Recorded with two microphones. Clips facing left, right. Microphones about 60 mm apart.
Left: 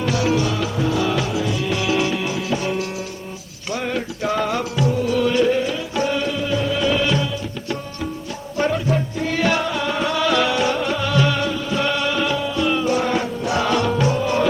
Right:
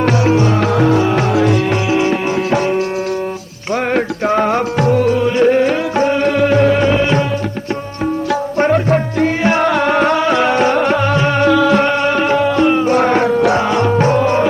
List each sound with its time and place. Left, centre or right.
0.1 s music: right
0.6 s music: right
1.9 s music: right
4.3 s music: right
5.1 s music: right
5.5 s music: right
6.3 s music: right
6.8 s music: right
8.5 s music: right
10.2 s music: right
11.4 s music: right
11.8 s music: right
12.6 s music: right
13.5 s music: right